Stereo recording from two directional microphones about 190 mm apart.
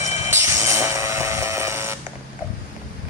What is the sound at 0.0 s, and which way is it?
Music, 40° left (ahead or behind).